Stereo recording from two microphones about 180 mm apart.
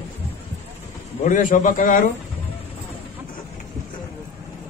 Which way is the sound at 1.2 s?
45° left (ahead or behind).